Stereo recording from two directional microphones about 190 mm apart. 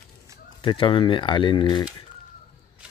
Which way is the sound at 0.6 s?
25° left (ahead or behind).